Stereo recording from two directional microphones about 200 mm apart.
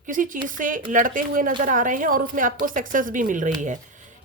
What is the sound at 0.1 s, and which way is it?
A woman's voice, 40° right (ahead or behind).